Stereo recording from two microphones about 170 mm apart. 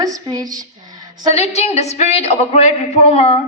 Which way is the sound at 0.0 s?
20° right (ahead or behind).